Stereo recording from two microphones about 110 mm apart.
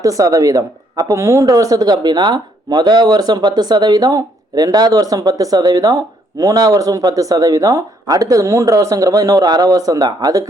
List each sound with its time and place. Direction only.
0.0 s speech: 30° right (ahead or behind)